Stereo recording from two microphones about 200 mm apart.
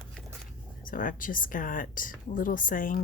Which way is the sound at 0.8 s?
45° left (ahead or behind).